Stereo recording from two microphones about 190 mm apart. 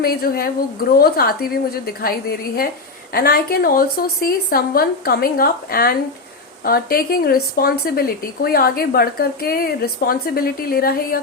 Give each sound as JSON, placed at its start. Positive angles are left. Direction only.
{"t": 0.0, "sound": "speech", "side_deg": 55}